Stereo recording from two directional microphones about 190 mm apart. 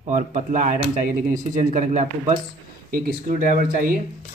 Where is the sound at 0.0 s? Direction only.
40° right (ahead or behind).